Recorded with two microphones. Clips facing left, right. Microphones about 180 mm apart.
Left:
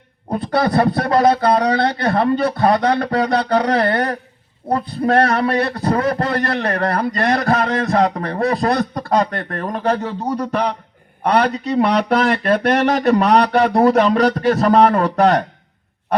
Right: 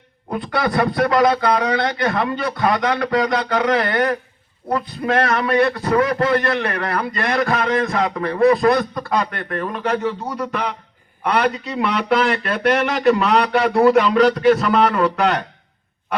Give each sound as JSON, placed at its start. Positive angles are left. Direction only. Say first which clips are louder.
{"t": 0.3, "sound": "a man's voice", "louder": "left 4 dB", "side_deg": 30}